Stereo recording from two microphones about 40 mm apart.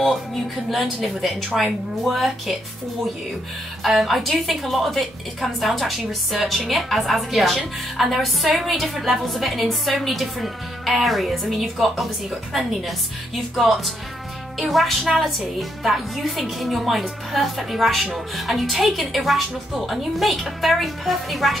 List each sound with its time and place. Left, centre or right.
0.7 s a woman's voice: centre
3.8 s a woman's voice: centre
13.6 s a woman's voice: centre